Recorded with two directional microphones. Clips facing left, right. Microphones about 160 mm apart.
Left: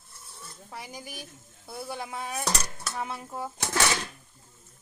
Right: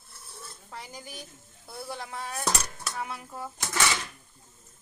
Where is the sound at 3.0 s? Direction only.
25° left (ahead or behind).